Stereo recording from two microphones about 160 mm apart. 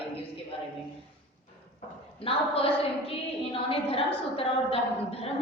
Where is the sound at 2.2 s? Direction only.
35° left (ahead or behind).